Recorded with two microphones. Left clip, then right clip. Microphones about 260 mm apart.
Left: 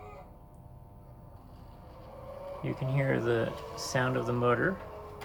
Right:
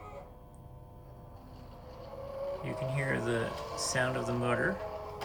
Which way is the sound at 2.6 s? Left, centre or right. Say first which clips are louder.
Left 5 dB; centre.